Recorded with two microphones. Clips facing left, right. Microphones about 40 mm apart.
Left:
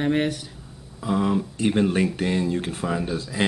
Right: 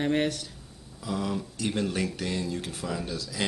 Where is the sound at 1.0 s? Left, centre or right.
Left.